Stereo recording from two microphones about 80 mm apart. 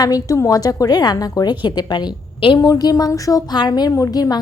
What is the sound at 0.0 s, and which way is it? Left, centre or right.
A woman's voice, left.